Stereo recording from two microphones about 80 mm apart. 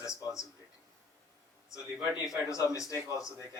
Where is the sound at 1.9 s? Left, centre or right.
Centre.